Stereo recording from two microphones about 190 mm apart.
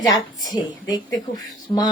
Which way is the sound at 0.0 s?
20° left (ahead or behind).